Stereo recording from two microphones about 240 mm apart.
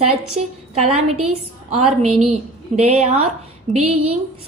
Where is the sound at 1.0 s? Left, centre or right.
Right.